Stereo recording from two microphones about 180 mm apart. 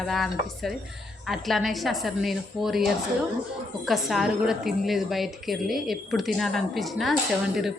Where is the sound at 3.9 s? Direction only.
Centre (ahead or behind).